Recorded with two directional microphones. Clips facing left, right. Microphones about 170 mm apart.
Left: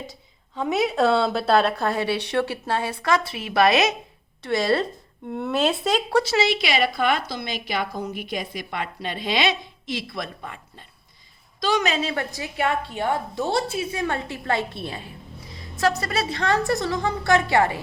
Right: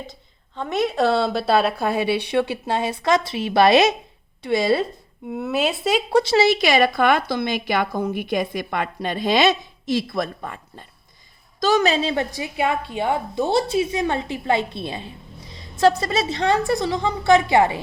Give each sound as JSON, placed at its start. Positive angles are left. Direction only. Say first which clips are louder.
{"t": 0.1, "sound": "a woman's voice", "louder": "left 1 dB", "side_deg": 5}
{"t": 4.4, "sound": "a woman's voice", "louder": "right 2 dB", "side_deg": -15}
{"t": 6.2, "sound": "a woman's voice", "louder": "right 5 dB", "side_deg": -35}